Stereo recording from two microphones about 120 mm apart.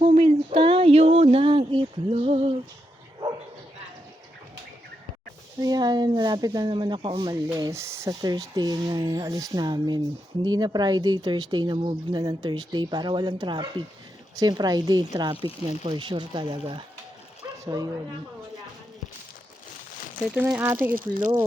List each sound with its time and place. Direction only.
0.2 s a sound: 50° right (ahead or behind)
5.5 s speech: 30° right (ahead or behind)
17.4 s bow-wow: 30° right (ahead or behind)
20.3 s speech: 15° right (ahead or behind)